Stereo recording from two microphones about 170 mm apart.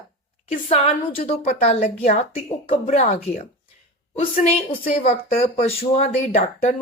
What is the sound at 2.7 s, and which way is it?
Speech, 40° left (ahead or behind).